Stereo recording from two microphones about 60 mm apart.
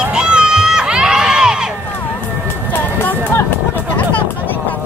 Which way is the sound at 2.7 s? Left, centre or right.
Left.